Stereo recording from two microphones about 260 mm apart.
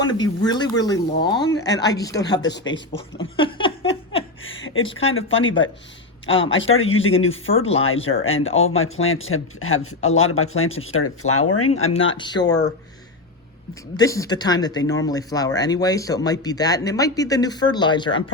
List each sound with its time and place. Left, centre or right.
0.0 s speech: centre
2.4 s speech: left
2.7 s speech: centre
4.4 s a sound: left
5.0 s speech: left
7.6 s speech: left
8.2 s speech: left
12.1 s speech: centre
13.9 s speech: centre